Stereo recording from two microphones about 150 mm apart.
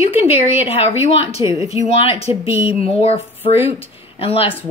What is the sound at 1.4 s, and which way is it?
Speech, 20° right (ahead or behind).